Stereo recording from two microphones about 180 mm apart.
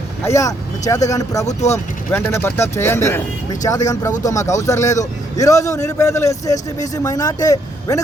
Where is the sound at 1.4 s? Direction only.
40° left (ahead or behind).